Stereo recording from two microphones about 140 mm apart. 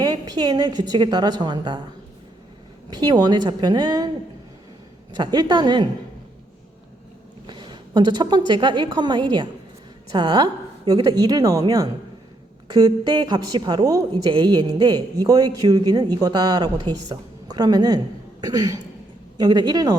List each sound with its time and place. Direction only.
0.0 s a woman's voice: 30° right (ahead or behind)
2.9 s a woman's voice: 30° right (ahead or behind)
5.1 s a woman's voice: 30° right (ahead or behind)
7.4 s a woman's voice: 35° right (ahead or behind)